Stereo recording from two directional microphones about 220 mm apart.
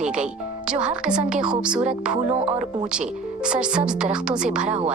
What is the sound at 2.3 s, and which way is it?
Speech, 30° right (ahead or behind).